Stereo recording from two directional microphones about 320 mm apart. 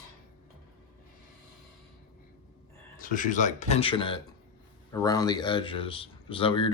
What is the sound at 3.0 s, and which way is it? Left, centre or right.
Speech, left.